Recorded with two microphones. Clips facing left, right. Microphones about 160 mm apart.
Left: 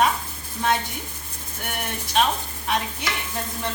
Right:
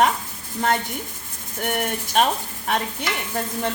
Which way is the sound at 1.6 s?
50° right (ahead or behind).